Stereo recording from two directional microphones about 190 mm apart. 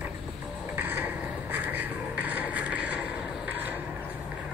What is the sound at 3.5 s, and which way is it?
Mechanisms, 10° right (ahead or behind).